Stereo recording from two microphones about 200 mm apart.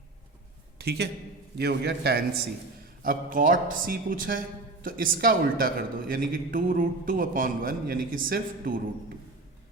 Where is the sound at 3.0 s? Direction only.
45° right (ahead or behind).